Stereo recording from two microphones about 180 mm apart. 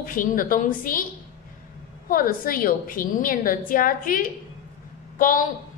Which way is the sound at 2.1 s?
50° left (ahead or behind).